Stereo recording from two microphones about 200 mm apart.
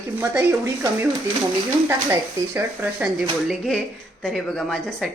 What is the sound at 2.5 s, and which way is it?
Speech, 10° right (ahead or behind).